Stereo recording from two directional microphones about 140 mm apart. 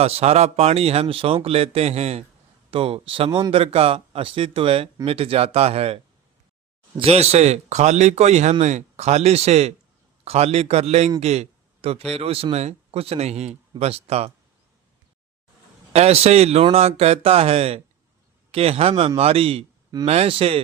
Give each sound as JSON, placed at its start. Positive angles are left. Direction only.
{"t": 0.0, "sound": "speech", "side_deg": -50}
{"t": 15.9, "sound": "speech", "side_deg": -50}